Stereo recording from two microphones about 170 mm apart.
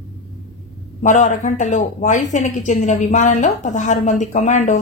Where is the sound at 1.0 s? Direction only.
45° left (ahead or behind).